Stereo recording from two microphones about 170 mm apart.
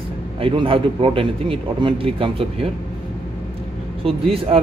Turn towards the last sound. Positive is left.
turn(degrees=-35)  # may be behind; listen again after turning